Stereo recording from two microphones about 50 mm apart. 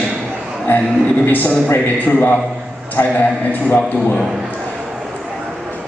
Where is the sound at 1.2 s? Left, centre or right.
Left.